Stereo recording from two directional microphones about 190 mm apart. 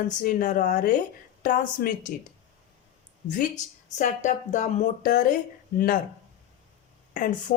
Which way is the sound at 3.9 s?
40° left (ahead or behind).